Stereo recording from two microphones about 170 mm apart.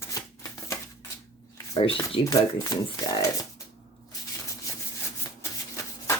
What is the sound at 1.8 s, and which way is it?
Speech, 30° left (ahead or behind).